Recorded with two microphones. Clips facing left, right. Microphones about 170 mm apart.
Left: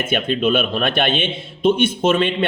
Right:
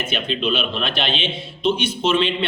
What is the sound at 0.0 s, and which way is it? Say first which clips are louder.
A man's voice: left 5 dB; 50° left (ahead or behind).